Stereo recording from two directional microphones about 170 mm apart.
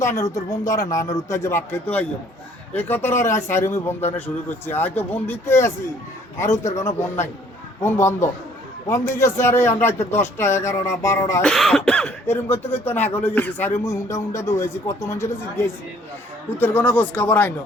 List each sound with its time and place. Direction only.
0.0 s a man's voice: 20° left (ahead or behind)
11.4 s a man's voice: 5° left (ahead or behind)